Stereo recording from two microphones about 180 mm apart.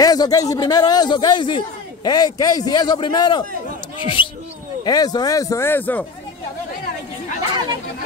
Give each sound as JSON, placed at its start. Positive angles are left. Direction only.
{"t": 0.0, "sound": "a man's voice", "side_deg": 20}